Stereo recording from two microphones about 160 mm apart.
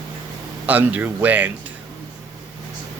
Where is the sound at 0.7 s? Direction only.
10° right (ahead or behind).